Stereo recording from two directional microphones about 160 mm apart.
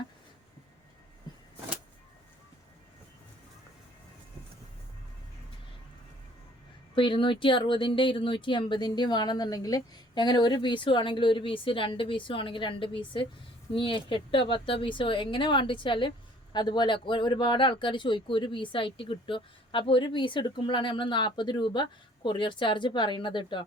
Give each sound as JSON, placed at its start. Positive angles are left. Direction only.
{"t": 6.9, "sound": "speech", "side_deg": 30}